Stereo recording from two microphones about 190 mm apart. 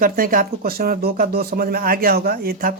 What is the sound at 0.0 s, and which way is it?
Speech, 45° right (ahead or behind).